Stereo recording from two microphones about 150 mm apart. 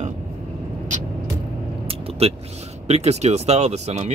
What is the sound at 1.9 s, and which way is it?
Vehicle, 40° right (ahead or behind).